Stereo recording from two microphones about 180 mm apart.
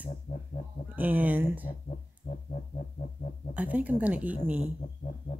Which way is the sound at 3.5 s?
10° right (ahead or behind).